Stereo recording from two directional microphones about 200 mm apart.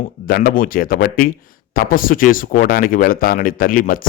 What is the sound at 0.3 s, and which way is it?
Speech, 45° left (ahead or behind).